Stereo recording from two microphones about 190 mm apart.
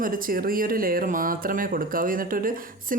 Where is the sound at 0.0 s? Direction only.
45° right (ahead or behind).